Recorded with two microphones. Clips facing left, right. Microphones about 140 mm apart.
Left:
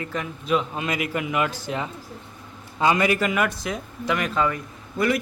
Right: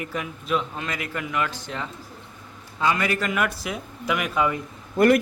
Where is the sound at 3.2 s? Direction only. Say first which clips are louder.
Left 2 dB; centre (ahead or behind).